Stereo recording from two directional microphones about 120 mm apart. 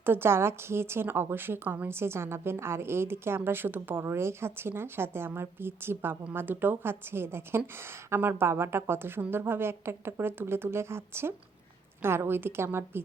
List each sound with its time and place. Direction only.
0.0 s a woman's voice: 20° right (ahead or behind)